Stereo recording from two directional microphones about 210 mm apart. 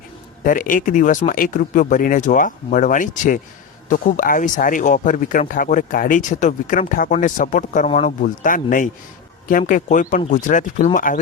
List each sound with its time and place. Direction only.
0.4 s speech: 40° left (ahead or behind)